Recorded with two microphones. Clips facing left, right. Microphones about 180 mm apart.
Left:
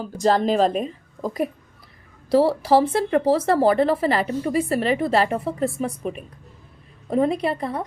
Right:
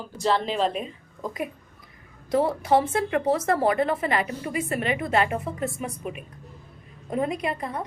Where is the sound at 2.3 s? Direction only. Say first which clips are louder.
Left 4 dB; 35° left (ahead or behind).